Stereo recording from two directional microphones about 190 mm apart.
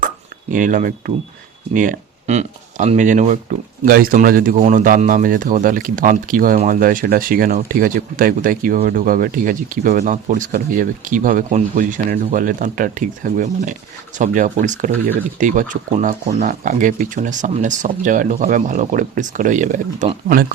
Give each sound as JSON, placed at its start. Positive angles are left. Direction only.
{"t": 0.5, "sound": "speech", "side_deg": -45}